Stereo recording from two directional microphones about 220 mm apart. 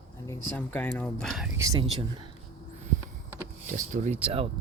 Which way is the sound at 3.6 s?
35° right (ahead or behind).